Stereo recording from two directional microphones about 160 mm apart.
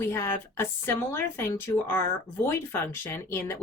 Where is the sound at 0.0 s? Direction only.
15° left (ahead or behind).